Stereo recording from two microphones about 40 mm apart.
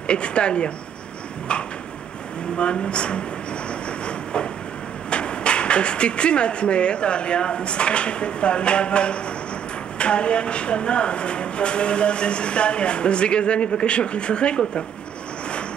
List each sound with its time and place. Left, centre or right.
0.0 s speech: left
1.5 s a sound: left
2.5 s speech: left
4.0 s train: left
5.1 s speech: left